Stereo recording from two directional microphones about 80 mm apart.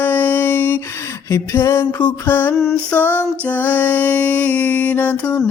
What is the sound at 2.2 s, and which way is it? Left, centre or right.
Music, left.